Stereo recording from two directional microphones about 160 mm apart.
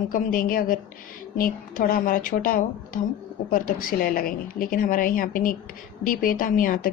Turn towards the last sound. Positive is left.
turn(degrees=60)  # may be behind; listen again after turning